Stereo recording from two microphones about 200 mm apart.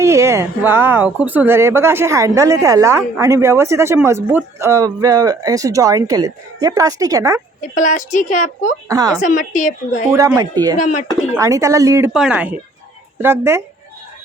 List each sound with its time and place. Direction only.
0.0 s speech: 15° right (ahead or behind)
7.8 s a woman's voice: 40° left (ahead or behind)
8.9 s speech: 15° right (ahead or behind)
9.2 s a woman's voice: 40° left (ahead or behind)
10.2 s speech: 15° right (ahead or behind)
10.8 s a woman's voice: 40° left (ahead or behind)
11.3 s speech: 15° right (ahead or behind)